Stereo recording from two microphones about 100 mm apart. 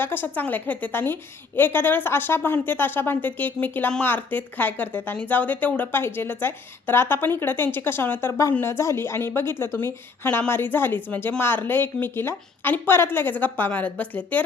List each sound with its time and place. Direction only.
0.0 s a woman's voice: 20° left (ahead or behind)